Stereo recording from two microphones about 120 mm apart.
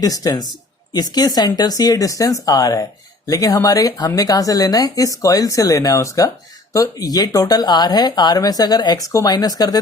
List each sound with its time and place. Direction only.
0.0 s a woman's voice: 30° left (ahead or behind)